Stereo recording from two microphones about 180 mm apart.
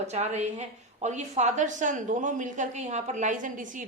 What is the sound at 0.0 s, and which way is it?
A woman's voice, 35° right (ahead or behind).